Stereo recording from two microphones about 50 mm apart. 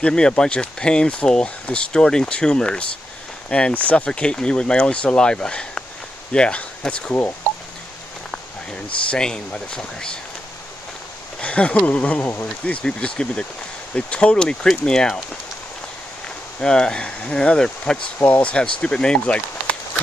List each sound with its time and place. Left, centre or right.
0.0 s speech: centre
9.1 s speech: centre
11.4 s speech: left
16.6 s speech: centre
18.2 s speech: left